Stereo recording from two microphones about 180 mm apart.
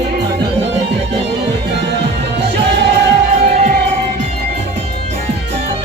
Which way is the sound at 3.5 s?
45° right (ahead or behind).